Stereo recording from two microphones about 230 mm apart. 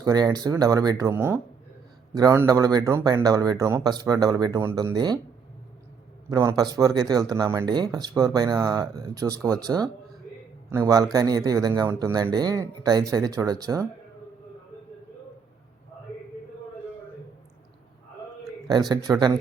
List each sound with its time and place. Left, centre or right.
0.0 s speech: centre
6.3 s speech: centre
18.7 s speech: centre